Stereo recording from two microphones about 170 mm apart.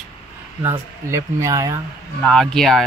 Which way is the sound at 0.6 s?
15° right (ahead or behind).